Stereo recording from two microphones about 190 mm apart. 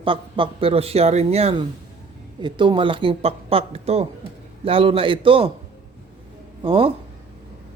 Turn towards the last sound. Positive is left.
turn(degrees=-30)  # may be behind; listen again after turning